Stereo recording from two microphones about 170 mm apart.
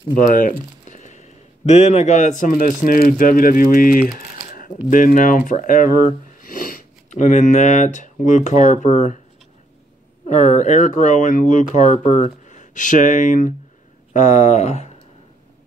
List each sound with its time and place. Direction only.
0.2 s speech: 55° left (ahead or behind)
10.3 s speech: 45° left (ahead or behind)